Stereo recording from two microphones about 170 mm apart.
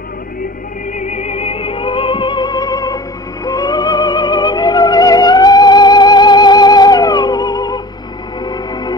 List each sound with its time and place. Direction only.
0.9 s music: 45° left (ahead or behind); by 8.9 s 25° left (ahead or behind)